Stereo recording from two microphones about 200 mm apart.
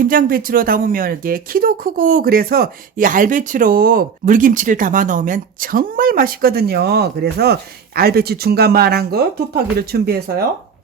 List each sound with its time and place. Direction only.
0.0 s speech: 45° right (ahead or behind)